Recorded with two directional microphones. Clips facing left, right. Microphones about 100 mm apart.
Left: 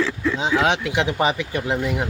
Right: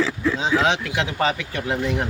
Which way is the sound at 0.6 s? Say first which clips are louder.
Left 2 dB; 15° left (ahead or behind).